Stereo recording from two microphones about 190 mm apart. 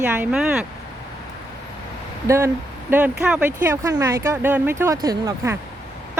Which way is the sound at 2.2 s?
15° right (ahead or behind).